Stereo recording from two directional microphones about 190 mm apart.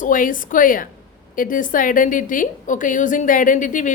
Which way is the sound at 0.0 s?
45° left (ahead or behind).